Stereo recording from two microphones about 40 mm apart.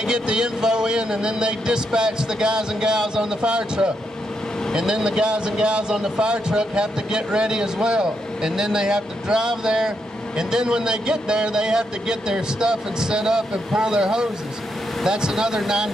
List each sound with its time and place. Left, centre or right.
0.0 s speech: centre